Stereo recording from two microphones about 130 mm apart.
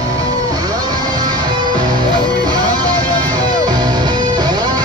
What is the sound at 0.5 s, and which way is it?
Music, 30° right (ahead or behind).